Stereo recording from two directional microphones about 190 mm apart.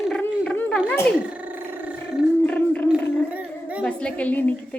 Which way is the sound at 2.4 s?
5° left (ahead or behind).